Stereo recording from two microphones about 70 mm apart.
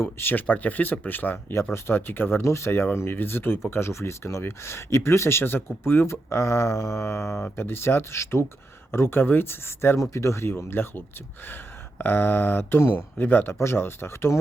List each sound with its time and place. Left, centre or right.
0.0 s speech: left